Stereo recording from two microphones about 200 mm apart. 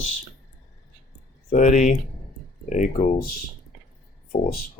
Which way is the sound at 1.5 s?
40° left (ahead or behind).